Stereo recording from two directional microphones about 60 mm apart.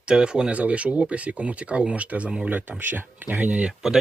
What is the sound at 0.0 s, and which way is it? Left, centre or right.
Speech, centre.